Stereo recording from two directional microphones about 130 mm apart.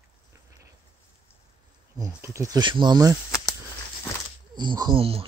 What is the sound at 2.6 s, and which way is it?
Speech, 35° right (ahead or behind).